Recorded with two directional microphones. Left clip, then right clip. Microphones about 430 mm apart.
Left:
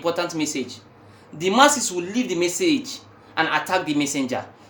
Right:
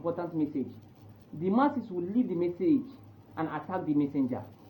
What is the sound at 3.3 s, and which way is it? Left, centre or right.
Speech, left.